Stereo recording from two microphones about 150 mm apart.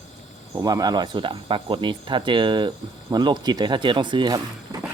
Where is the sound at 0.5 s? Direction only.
25° right (ahead or behind).